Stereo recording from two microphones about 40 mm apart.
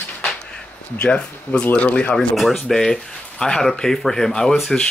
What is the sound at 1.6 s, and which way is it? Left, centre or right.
Speech, left.